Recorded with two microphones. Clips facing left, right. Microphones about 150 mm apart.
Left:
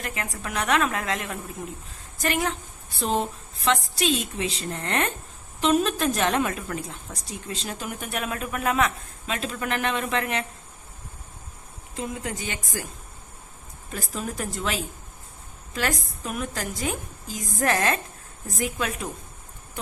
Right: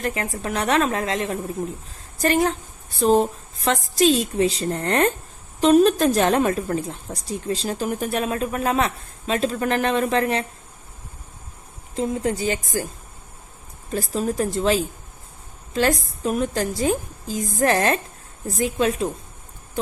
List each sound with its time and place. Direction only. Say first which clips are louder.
0.0 s speech: right 7 dB; 35° right (ahead or behind)
11.9 s speech: right 8 dB; 35° right (ahead or behind)
13.9 s a woman's voice: right 8 dB; 30° right (ahead or behind)